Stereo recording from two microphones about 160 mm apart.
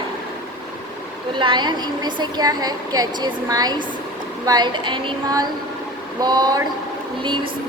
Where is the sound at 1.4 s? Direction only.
30° right (ahead or behind).